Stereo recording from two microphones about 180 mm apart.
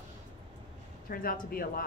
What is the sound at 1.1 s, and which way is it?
Speech, 55° left (ahead or behind).